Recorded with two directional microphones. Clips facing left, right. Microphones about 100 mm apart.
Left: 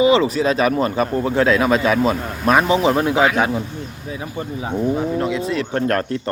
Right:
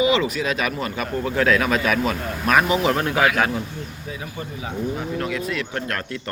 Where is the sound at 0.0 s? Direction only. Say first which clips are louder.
Left 5 dB; 30° left (ahead or behind).